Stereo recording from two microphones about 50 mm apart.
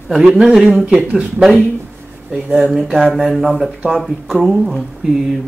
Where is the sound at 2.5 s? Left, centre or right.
Centre.